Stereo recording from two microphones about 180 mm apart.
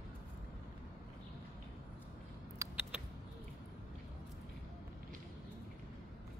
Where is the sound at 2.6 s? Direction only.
15° right (ahead or behind).